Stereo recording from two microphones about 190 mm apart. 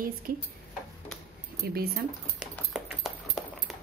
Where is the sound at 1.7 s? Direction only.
55° right (ahead or behind).